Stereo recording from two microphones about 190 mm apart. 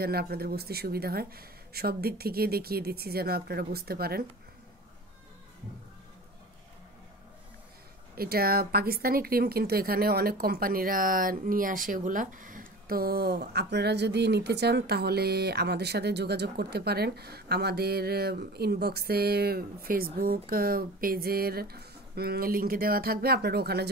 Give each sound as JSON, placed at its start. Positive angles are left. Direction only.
{"t": 0.0, "sound": "speech", "side_deg": -55}
{"t": 8.2, "sound": "speech", "side_deg": -55}